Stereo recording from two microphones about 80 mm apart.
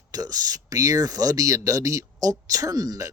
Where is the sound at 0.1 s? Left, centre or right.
Right.